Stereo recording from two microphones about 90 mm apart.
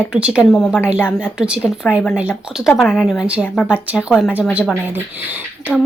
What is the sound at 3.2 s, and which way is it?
A woman's voice, 15° right (ahead or behind).